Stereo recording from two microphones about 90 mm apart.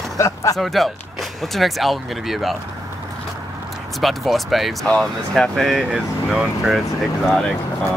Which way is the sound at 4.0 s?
Centre (ahead or behind).